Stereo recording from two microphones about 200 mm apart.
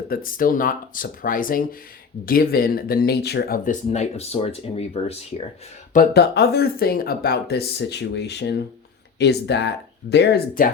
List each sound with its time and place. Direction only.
0.1 s speech: 45° left (ahead or behind)
5.9 s speech: 50° left (ahead or behind)